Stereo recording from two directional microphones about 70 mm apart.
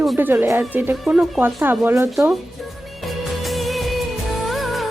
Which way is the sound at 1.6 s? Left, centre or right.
Right.